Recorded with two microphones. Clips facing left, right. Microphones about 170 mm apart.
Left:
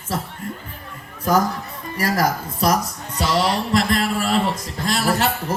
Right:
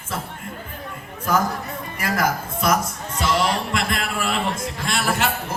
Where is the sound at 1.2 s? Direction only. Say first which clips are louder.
Left 3 dB; 40° left (ahead or behind).